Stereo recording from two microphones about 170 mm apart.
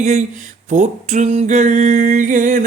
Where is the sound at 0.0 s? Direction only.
45° right (ahead or behind).